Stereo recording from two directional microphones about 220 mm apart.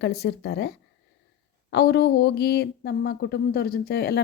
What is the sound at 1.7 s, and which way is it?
Speech, 50° left (ahead or behind).